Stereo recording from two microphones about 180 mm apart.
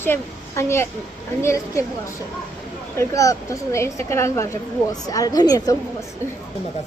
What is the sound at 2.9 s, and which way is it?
A woman's voice, 20° left (ahead or behind).